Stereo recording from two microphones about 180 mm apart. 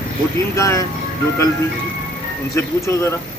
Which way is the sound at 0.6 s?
15° left (ahead or behind).